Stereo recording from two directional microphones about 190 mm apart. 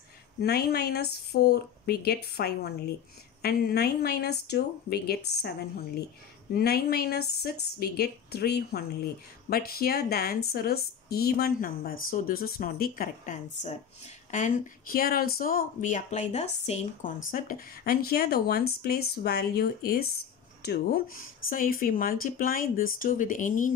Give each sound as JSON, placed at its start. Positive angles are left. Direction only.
{"t": 0.4, "sound": "speech", "side_deg": 55}
{"t": 6.5, "sound": "speech", "side_deg": 55}